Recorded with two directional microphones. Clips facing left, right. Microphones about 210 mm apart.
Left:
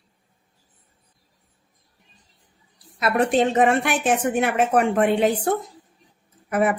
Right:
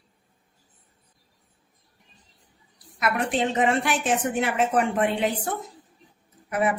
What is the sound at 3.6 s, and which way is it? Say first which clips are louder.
A woman's voice: left 4 dB; 55° left (ahead or behind).